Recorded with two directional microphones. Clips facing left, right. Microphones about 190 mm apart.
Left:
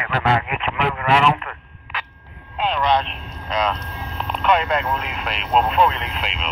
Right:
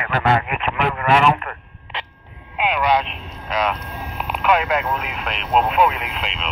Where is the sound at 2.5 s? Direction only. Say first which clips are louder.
Right 1 dB; 10° right (ahead or behind).